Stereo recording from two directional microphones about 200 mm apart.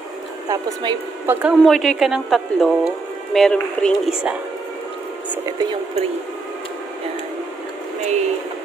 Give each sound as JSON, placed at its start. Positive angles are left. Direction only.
{"t": 0.5, "sound": "a woman's voice", "side_deg": -15}
{"t": 1.6, "sound": "a woman's voice", "side_deg": 0}
{"t": 5.3, "sound": "a woman's voice", "side_deg": -15}
{"t": 8.0, "sound": "speech", "side_deg": -35}